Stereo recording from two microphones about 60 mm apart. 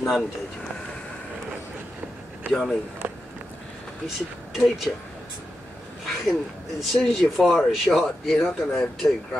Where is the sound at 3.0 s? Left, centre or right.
Right.